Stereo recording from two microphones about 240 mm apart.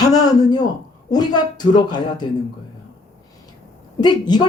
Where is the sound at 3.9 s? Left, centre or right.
Centre.